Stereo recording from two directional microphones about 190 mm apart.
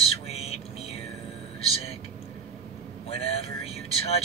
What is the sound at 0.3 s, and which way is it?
Music, 35° left (ahead or behind).